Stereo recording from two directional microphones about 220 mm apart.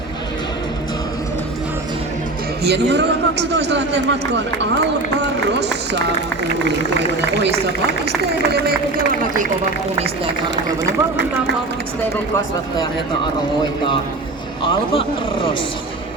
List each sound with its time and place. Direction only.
2.6 s a man's voice: 50° right (ahead or behind)
13.6 s speech: 20° left (ahead or behind)